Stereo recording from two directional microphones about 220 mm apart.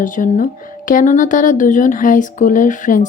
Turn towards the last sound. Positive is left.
turn(degrees=35)  # may be behind; listen again after turning